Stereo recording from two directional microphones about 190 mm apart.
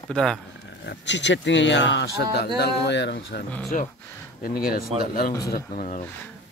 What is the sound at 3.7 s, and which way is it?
Speech, 40° left (ahead or behind).